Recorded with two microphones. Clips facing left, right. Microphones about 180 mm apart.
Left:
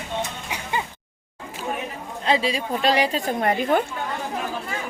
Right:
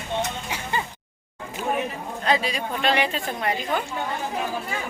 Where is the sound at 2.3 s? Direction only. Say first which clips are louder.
Left 2 dB; 25° left (ahead or behind); by 3.8 s 45° left (ahead or behind).